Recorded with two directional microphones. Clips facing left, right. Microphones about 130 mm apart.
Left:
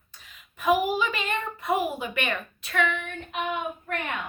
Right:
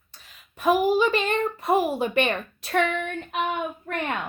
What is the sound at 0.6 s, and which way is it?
A woman's voice, 35° right (ahead or behind).